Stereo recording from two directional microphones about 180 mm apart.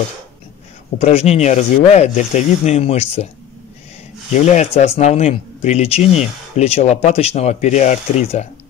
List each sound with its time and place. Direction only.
0.9 s speech: 35° left (ahead or behind)
4.3 s speech: 40° left (ahead or behind)